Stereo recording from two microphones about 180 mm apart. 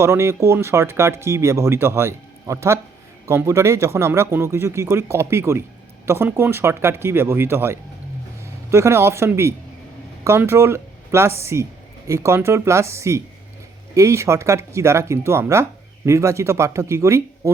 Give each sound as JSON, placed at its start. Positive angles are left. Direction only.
{"t": 0.0, "sound": "speech", "side_deg": -15}